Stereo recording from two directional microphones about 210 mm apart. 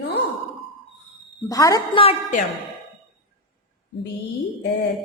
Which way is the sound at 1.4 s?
15° left (ahead or behind).